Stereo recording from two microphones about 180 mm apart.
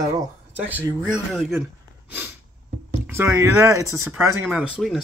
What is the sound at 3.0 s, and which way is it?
Speech, 15° right (ahead or behind).